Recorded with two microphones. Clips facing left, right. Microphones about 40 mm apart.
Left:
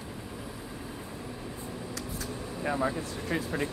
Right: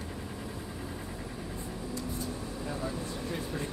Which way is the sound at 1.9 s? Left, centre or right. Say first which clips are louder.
Right 4 dB; left.